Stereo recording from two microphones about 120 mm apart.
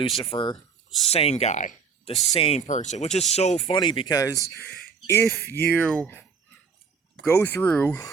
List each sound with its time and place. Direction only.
0.2 s speech: 45° left (ahead or behind)
1.0 s speech: 60° left (ahead or behind)
3.7 s speech: 45° left (ahead or behind); by 5.8 s 20° left (ahead or behind)
5.8 s speech: 10° left (ahead or behind)
7.3 s speech: 15° left (ahead or behind)